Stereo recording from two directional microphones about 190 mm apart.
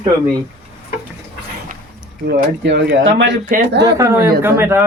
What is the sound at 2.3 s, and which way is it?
Speech, 65° right (ahead or behind).